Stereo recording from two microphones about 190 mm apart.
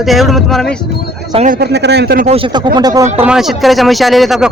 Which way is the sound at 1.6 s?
60° right (ahead or behind).